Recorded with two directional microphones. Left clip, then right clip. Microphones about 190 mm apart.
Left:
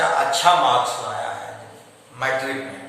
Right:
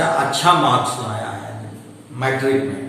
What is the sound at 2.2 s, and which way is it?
Speech, 15° left (ahead or behind).